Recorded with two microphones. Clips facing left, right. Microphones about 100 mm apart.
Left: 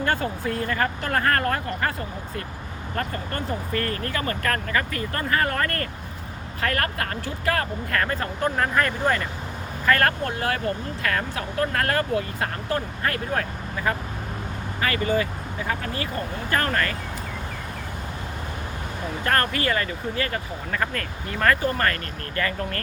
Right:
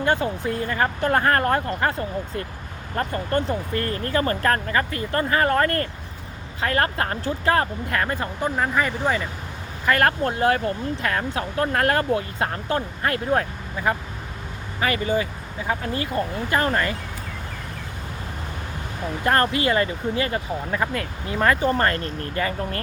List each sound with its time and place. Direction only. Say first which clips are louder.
0.0 s speech: right 3 dB; 20° right (ahead or behind)
9.8 s speech: right 2 dB; 20° right (ahead or behind)
19.2 s speech: right 3 dB; 20° right (ahead or behind)